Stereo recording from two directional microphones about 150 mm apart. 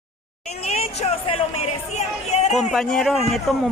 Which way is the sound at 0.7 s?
45° left (ahead or behind).